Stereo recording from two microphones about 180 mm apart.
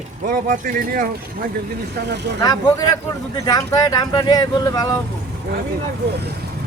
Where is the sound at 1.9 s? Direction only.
70° right (ahead or behind).